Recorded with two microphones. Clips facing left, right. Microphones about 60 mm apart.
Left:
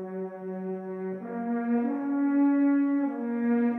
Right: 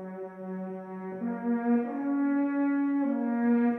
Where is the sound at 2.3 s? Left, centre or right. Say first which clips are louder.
Left 8 dB; centre.